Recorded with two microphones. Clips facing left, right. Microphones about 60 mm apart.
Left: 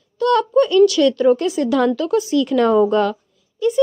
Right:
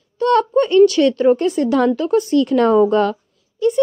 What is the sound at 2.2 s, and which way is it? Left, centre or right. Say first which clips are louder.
Speech: right 2 dB; right.